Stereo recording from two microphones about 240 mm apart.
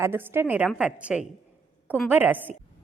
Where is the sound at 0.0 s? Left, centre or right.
Centre.